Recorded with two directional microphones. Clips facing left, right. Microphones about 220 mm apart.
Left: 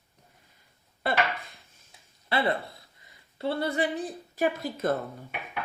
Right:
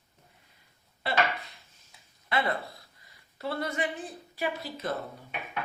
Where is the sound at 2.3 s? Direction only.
30° left (ahead or behind).